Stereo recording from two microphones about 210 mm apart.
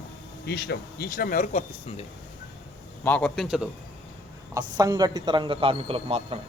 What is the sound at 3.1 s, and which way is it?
Speech, 5° left (ahead or behind).